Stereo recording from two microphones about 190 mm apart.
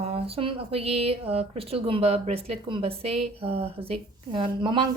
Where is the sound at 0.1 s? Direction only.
30° right (ahead or behind).